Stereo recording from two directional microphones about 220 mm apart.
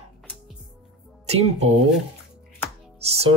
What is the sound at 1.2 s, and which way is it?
Speech, 30° right (ahead or behind).